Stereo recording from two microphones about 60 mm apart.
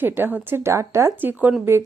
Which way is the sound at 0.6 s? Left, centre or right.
Right.